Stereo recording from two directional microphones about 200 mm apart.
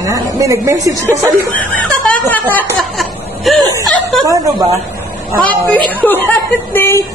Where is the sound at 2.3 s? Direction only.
10° left (ahead or behind).